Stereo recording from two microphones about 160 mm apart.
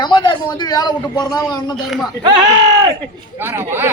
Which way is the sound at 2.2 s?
25° right (ahead or behind).